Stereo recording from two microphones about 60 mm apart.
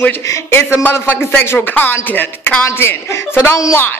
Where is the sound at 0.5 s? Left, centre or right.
Left.